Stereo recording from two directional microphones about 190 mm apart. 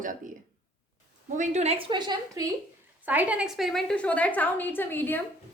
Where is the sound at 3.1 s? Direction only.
10° right (ahead or behind).